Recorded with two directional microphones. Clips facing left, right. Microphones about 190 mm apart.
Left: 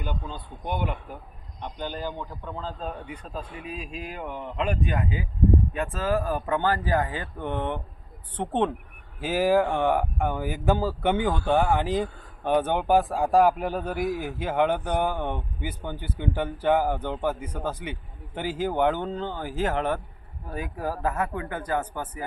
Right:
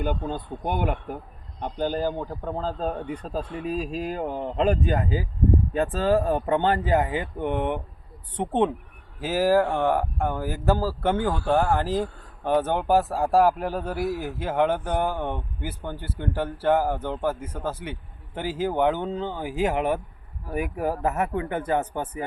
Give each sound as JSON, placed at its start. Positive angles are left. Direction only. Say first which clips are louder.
{"t": 0.0, "sound": "speech", "louder": "right 7 dB", "side_deg": -55}
{"t": 1.6, "sound": "a man's voice", "louder": "right 7 dB", "side_deg": -40}